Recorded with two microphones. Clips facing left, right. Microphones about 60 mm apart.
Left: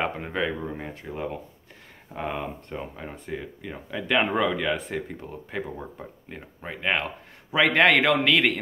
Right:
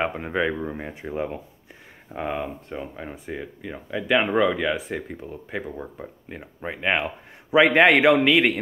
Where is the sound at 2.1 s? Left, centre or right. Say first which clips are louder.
Right 2 dB; centre.